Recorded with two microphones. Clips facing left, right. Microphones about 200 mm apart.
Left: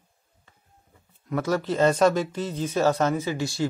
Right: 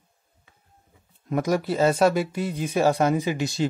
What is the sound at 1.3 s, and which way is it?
Speech, 15° right (ahead or behind).